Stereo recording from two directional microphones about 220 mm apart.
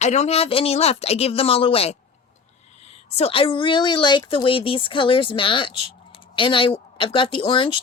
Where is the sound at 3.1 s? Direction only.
25° left (ahead or behind).